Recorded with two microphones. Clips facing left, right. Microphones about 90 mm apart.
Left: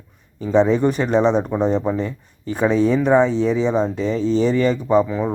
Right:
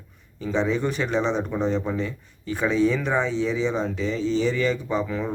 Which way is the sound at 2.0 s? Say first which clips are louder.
Left 4 dB; 35° left (ahead or behind).